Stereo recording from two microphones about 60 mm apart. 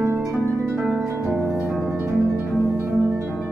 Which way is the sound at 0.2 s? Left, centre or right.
Right.